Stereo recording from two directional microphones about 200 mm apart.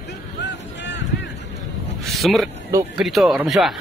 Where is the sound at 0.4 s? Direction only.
60° left (ahead or behind).